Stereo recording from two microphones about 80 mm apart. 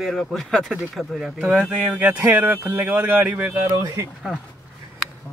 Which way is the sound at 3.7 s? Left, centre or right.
Right.